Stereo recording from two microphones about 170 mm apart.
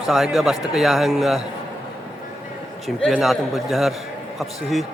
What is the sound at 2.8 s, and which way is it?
A man's voice, centre (ahead or behind).